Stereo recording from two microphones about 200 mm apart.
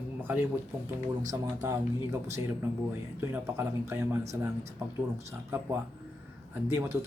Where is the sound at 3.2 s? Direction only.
10° right (ahead or behind).